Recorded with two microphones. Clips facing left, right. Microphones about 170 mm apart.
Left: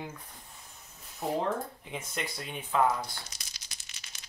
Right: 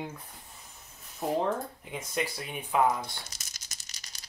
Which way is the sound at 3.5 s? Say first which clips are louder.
Even; 45° right (ahead or behind).